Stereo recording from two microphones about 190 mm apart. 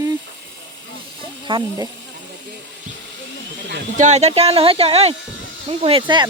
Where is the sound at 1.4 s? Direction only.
25° right (ahead or behind).